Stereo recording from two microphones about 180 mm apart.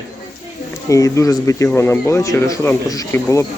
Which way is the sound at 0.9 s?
15° left (ahead or behind).